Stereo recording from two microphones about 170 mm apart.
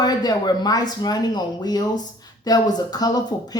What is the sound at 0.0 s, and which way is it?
Speech, 25° left (ahead or behind).